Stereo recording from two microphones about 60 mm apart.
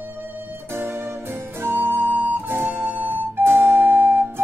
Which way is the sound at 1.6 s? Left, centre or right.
Right.